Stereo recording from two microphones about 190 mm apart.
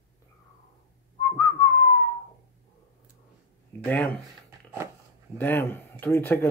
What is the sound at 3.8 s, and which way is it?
Speech, 10° left (ahead or behind).